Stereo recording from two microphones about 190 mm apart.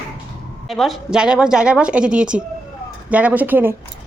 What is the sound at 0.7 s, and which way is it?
A woman's voice, centre (ahead or behind).